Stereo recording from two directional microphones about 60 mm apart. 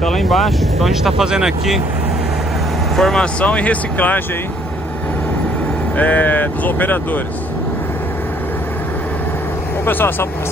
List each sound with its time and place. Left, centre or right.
0.0 s speech: centre
3.0 s speech: centre
3.3 s speech: left
5.9 s speech: left
9.8 s speech: left